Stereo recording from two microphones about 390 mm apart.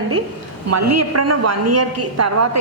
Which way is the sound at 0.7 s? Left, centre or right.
Right.